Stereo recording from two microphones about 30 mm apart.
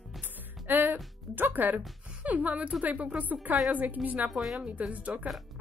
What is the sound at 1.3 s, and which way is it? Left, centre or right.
Speech, right.